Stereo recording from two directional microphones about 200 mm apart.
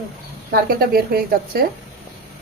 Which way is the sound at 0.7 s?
50° right (ahead or behind).